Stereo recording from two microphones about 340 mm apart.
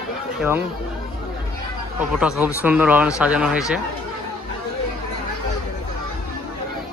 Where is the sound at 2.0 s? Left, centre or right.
Centre.